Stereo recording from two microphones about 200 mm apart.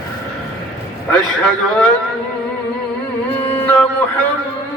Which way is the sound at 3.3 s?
10° left (ahead or behind).